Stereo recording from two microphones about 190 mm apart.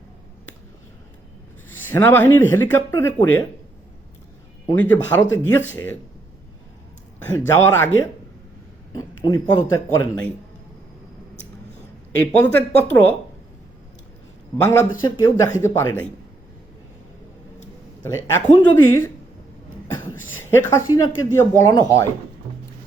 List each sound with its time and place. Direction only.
1.9 s speech: 10° left (ahead or behind)
4.6 s speech: 10° left (ahead or behind)
7.3 s speech: 15° left (ahead or behind)
8.9 s speech: 20° left (ahead or behind)
12.2 s speech: 10° left (ahead or behind)
14.6 s speech: 15° left (ahead or behind)
18.3 s speech: 15° left (ahead or behind)
20.3 s speech: 15° left (ahead or behind)